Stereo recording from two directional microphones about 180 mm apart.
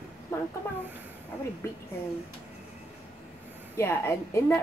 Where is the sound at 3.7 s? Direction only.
15° left (ahead or behind).